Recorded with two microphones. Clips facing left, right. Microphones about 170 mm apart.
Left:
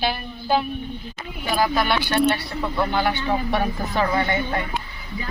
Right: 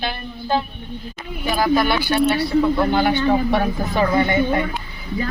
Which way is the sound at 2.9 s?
20° right (ahead or behind).